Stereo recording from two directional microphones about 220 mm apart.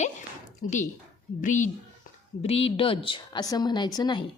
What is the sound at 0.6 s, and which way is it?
A woman's voice, 35° left (ahead or behind).